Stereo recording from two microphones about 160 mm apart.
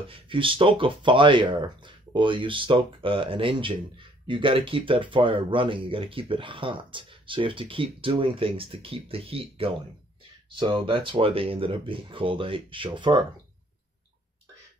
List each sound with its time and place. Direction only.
0.1 s speech: 30° right (ahead or behind)